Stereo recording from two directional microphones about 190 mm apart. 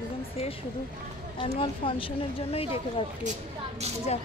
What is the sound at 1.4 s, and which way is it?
Speech, 25° left (ahead or behind).